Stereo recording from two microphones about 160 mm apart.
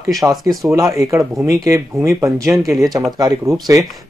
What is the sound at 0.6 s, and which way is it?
Speech, 20° right (ahead or behind).